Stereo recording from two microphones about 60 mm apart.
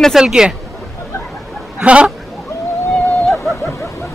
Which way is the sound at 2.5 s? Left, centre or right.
Left.